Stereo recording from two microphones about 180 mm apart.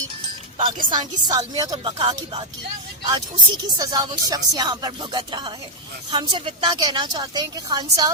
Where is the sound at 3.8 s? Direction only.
20° right (ahead or behind).